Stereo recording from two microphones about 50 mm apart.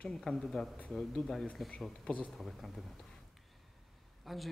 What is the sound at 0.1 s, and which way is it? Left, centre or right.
Speech, centre.